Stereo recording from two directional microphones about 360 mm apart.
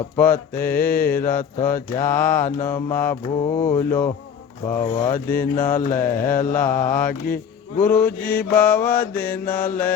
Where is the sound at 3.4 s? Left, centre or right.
Centre.